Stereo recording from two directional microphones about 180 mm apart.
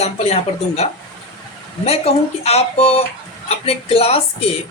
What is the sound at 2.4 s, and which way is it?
A woman's voice, 35° left (ahead or behind).